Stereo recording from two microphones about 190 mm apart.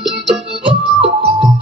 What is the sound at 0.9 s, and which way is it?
Music, 25° right (ahead or behind).